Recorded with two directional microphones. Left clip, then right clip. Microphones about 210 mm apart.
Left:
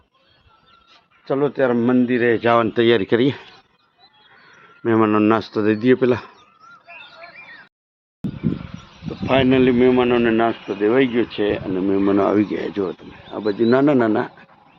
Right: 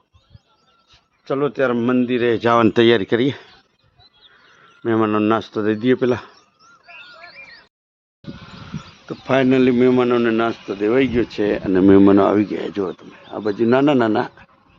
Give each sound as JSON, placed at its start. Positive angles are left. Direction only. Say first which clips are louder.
{"t": 1.2, "sound": "speech", "louder": "even", "side_deg": 5}
{"t": 4.8, "sound": "speech", "louder": "left 2 dB", "side_deg": 5}
{"t": 9.2, "sound": "speech", "louder": "even", "side_deg": -20}
{"t": 11.7, "sound": "speech", "louder": "right 8 dB", "side_deg": -55}
{"t": 12.1, "sound": "speech", "louder": "right 2 dB", "side_deg": -15}